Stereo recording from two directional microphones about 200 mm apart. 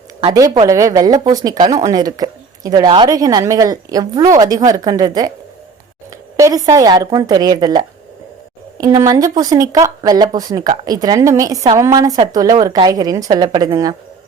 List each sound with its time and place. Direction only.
0.3 s speech: 20° right (ahead or behind)
6.3 s speech: 15° right (ahead or behind)